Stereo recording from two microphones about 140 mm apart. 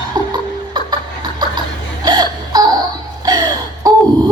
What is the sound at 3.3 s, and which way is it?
Wail, 30° right (ahead or behind).